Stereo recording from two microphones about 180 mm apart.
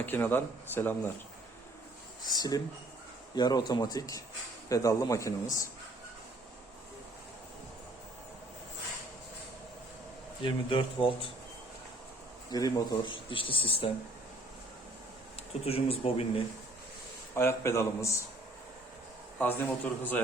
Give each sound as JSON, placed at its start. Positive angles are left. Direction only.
{"t": 0.0, "sound": "speech", "side_deg": 10}
{"t": 2.3, "sound": "speech", "side_deg": 20}
{"t": 10.4, "sound": "speech", "side_deg": 30}
{"t": 12.5, "sound": "speech", "side_deg": 20}
{"t": 15.6, "sound": "speech", "side_deg": 30}
{"t": 17.3, "sound": "speech", "side_deg": 15}
{"t": 19.4, "sound": "speech", "side_deg": 10}